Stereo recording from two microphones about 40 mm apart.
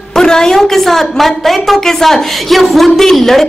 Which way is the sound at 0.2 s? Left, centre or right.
Centre.